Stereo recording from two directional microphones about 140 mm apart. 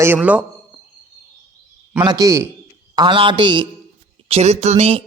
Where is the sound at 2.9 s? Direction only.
35° right (ahead or behind).